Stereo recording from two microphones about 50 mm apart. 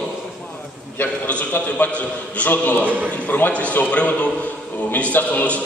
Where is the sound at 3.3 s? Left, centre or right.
Left.